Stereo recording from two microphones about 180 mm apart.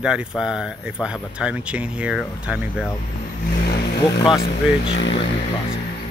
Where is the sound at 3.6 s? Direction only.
65° left (ahead or behind).